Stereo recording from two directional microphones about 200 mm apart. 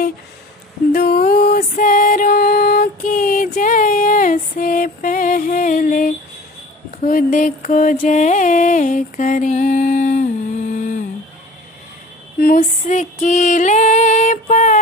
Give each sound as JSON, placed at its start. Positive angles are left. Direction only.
{"t": 0.9, "sound": "music", "side_deg": 45}
{"t": 7.0, "sound": "mantra", "side_deg": 45}
{"t": 12.4, "sound": "mantra", "side_deg": 45}